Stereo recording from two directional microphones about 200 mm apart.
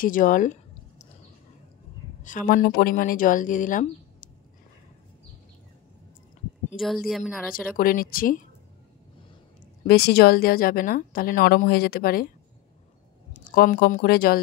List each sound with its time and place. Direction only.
0.0 s a sound: 40° left (ahead or behind)
2.2 s speech: 40° left (ahead or behind)
6.8 s a woman's voice: centre (ahead or behind)
7.5 s a woman's voice: 45° left (ahead or behind)
9.8 s a woman's voice: 50° left (ahead or behind)
13.3 s speech: 40° left (ahead or behind)